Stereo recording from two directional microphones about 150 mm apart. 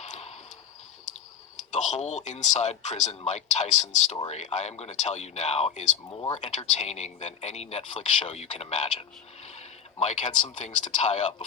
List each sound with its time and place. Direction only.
0.0 s a sound: 50° left (ahead or behind)
1.7 s speech: 50° left (ahead or behind)
6.1 s speech: 25° left (ahead or behind)
6.3 s speech: 45° left (ahead or behind)